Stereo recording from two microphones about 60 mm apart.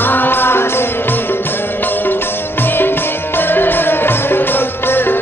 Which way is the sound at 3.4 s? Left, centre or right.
Left.